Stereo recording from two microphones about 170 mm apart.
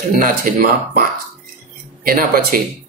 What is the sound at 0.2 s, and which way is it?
Speech, 55° right (ahead or behind).